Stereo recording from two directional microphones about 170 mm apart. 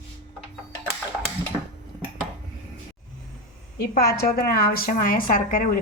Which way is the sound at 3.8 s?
65° left (ahead or behind).